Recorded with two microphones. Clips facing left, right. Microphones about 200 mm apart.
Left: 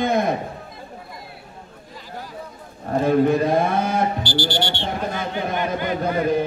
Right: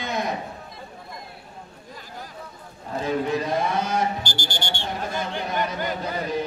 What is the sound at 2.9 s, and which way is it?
A man's voice, 55° left (ahead or behind).